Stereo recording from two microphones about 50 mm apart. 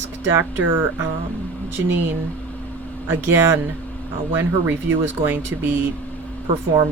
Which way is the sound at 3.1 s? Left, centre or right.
Right.